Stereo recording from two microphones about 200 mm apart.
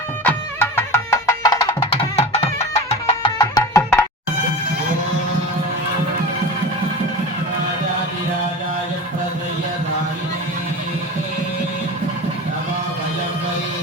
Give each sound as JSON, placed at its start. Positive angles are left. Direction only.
{"t": 0.3, "sound": "music", "side_deg": 10}